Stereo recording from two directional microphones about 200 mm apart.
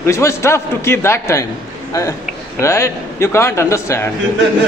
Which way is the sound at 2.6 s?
15° left (ahead or behind).